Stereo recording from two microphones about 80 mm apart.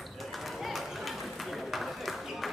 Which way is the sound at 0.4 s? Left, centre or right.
Centre.